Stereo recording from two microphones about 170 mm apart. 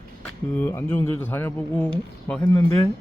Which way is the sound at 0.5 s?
10° left (ahead or behind).